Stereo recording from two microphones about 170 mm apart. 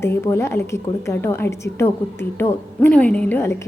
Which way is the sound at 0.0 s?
15° left (ahead or behind).